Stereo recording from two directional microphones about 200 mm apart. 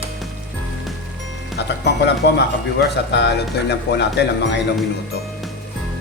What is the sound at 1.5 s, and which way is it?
Speech, 55° left (ahead or behind).